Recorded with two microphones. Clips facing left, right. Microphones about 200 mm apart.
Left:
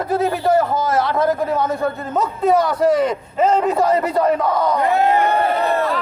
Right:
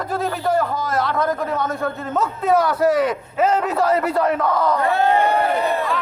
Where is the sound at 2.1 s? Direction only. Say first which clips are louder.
Left 2 dB; 5° right (ahead or behind).